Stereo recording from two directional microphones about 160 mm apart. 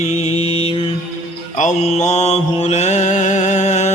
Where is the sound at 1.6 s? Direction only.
45° left (ahead or behind).